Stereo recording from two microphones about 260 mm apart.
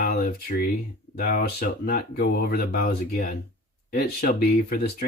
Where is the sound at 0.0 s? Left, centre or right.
Left.